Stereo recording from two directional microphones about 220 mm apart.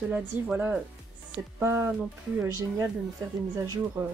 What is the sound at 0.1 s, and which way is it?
Speech, 5° right (ahead or behind).